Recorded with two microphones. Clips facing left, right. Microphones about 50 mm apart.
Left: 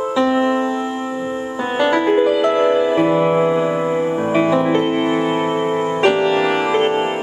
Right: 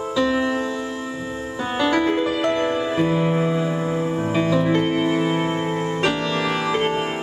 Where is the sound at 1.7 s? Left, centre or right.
Left.